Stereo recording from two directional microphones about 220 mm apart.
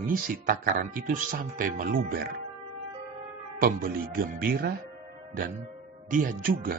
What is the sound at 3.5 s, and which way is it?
Speech, 40° right (ahead or behind).